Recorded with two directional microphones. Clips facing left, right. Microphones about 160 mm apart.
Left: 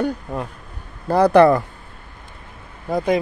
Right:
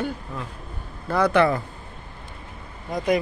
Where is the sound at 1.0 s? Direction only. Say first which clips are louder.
Left 7 dB; 35° left (ahead or behind).